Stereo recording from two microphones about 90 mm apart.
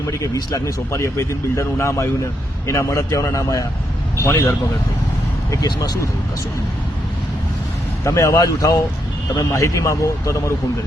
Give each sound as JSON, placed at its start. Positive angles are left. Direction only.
{"t": 0.0, "sound": "speech", "side_deg": 35}
{"t": 5.5, "sound": "speech", "side_deg": 45}
{"t": 8.0, "sound": "speech", "side_deg": 35}